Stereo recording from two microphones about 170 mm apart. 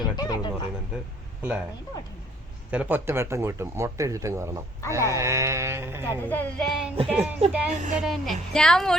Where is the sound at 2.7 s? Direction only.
10° right (ahead or behind).